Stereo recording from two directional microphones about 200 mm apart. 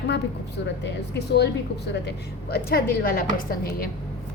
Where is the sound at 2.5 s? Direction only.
50° left (ahead or behind).